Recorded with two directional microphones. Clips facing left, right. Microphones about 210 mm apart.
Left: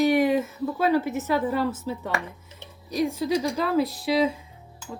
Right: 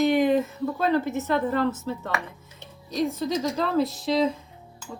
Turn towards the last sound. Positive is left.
turn(degrees=10)  # may be behind; listen again after turning